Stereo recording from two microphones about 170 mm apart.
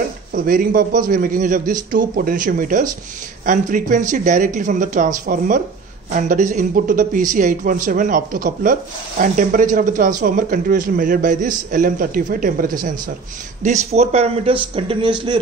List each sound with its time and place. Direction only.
0.3 s speech: 55° right (ahead or behind)
13.6 s speech: 40° right (ahead or behind)